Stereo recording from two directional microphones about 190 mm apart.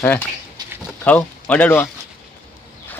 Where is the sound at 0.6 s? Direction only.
20° right (ahead or behind).